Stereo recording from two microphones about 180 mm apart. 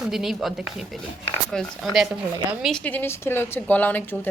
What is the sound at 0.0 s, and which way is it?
A woman's voice, centre (ahead or behind).